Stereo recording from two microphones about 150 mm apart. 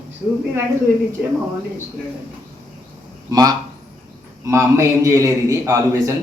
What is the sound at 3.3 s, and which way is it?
A man's voice, 25° right (ahead or behind).